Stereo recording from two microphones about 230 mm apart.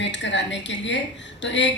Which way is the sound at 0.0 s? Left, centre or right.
Left.